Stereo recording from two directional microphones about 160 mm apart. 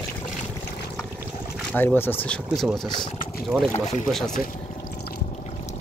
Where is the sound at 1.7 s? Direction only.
10° left (ahead or behind).